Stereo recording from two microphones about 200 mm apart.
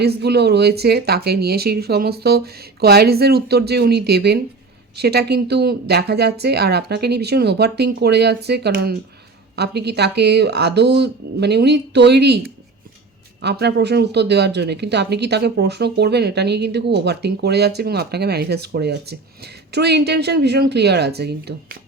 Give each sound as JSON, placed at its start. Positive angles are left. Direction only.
{"t": 0.0, "sound": "a woman's voice", "side_deg": -55}